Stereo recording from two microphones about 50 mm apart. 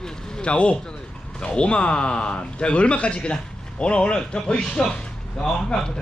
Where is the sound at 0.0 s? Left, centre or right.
Centre.